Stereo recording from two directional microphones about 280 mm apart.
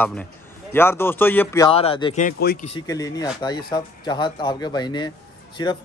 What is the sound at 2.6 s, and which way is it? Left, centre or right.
A man's voice, centre.